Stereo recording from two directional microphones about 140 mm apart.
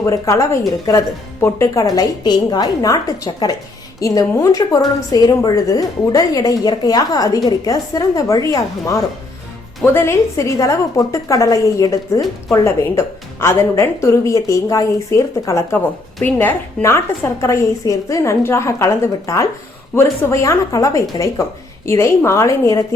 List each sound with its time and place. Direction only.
0.0 s a woman's voice: 20° left (ahead or behind)